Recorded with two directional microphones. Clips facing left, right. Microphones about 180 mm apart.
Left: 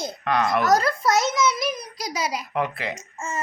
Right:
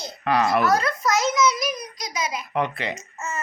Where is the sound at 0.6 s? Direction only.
35° left (ahead or behind).